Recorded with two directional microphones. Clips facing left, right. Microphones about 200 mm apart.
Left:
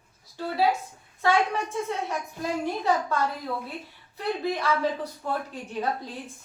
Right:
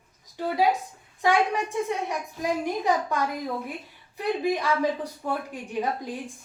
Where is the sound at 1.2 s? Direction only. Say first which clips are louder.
Right 1 dB; 15° right (ahead or behind).